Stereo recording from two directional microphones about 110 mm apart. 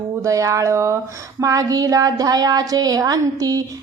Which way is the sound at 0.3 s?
30° right (ahead or behind).